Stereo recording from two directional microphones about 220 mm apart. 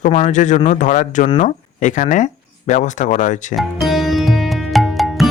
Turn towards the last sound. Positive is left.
turn(degrees=0)  # may be behind; listen again after turning